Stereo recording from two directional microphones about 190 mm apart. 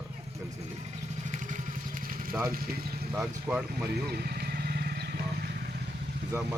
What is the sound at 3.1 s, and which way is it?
Speech, 5° right (ahead or behind).